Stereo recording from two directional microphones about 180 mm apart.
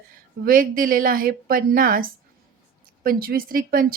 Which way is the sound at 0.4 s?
50° right (ahead or behind).